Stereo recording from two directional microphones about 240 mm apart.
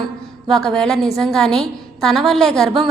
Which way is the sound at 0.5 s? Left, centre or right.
Centre.